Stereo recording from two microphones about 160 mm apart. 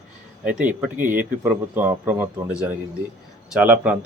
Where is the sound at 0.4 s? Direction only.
10° right (ahead or behind).